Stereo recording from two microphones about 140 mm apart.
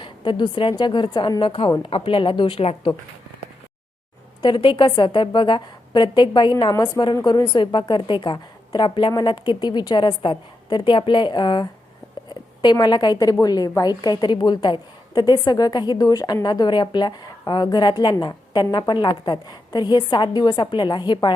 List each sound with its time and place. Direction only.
0.0 s a woman's voice: 35° left (ahead or behind)
4.4 s a woman's voice: 35° left (ahead or behind)